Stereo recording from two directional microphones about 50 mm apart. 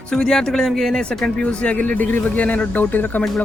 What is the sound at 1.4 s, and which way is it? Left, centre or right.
Speech, left.